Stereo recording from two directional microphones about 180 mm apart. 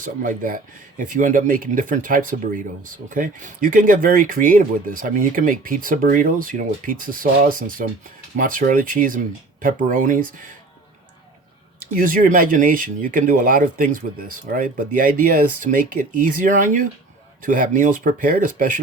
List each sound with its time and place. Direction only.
0.0 s speech: 50° right (ahead or behind)
11.9 s speech: 50° right (ahead or behind)